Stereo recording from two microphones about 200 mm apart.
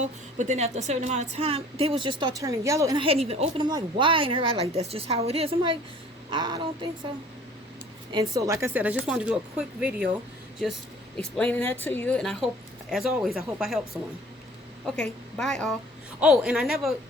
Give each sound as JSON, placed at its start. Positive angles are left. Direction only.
{"t": 0.0, "sound": "a woman's voice", "side_deg": -35}
{"t": 8.1, "sound": "speech", "side_deg": -20}
{"t": 11.2, "sound": "speech", "side_deg": 5}
{"t": 14.8, "sound": "speech", "side_deg": 5}